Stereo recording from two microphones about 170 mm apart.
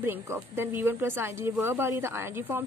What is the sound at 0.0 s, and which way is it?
A woman's voice, 15° right (ahead or behind).